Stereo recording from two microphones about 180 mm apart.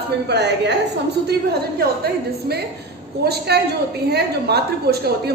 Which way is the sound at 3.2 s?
65° right (ahead or behind).